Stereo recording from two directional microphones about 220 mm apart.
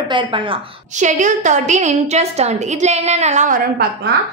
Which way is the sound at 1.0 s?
35° right (ahead or behind).